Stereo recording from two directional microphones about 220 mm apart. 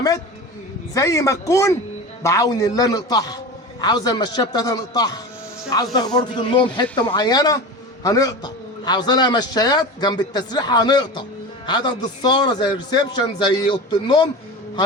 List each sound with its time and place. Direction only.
0.9 s a man's voice: 15° left (ahead or behind)